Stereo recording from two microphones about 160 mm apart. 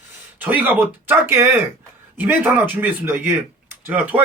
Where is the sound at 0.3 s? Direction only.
10° right (ahead or behind).